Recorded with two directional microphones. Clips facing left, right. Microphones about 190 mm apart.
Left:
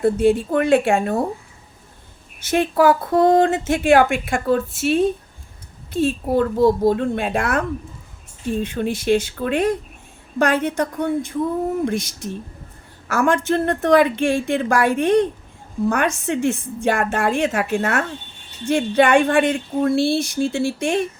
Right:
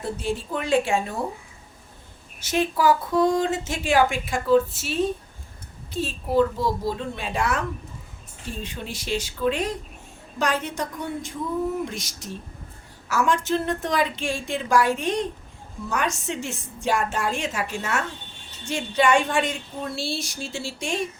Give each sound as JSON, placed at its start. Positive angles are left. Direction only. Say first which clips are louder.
{"t": 0.0, "sound": "speech", "louder": "left 12 dB", "side_deg": 60}
{"t": 2.4, "sound": "speech", "louder": "left 6 dB", "side_deg": 55}
{"t": 8.6, "sound": "speech", "louder": "left 14 dB", "side_deg": 55}